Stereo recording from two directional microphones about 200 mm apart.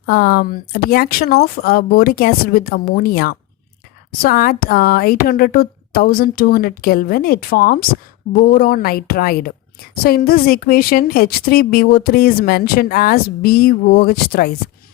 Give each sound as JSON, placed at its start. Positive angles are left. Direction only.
{"t": 0.0, "sound": "a woman's voice", "side_deg": 45}